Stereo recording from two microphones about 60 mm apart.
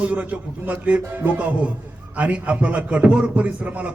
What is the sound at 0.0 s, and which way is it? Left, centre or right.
A man's voice, right.